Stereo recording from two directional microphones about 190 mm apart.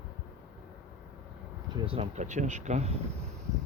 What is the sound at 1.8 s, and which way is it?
Speech, 30° right (ahead or behind).